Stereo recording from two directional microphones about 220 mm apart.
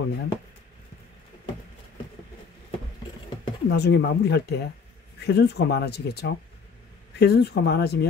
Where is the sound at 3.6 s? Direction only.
50° left (ahead or behind).